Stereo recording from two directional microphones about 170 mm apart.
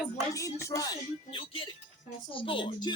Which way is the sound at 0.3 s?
20° left (ahead or behind).